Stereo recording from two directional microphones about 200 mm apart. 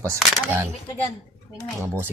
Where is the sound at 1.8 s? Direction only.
10° right (ahead or behind).